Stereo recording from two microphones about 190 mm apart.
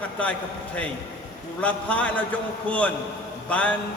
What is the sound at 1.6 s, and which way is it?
A man's voice, 5° left (ahead or behind).